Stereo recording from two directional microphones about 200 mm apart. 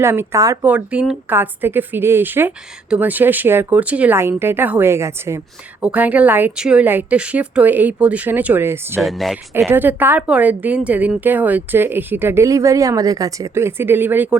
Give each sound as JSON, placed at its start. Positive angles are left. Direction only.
{"t": 0.0, "sound": "speech", "side_deg": -15}
{"t": 9.0, "sound": "speech", "side_deg": 0}
{"t": 9.6, "sound": "speech", "side_deg": -10}